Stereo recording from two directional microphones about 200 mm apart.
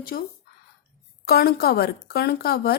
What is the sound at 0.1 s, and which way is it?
Speech, 45° left (ahead or behind).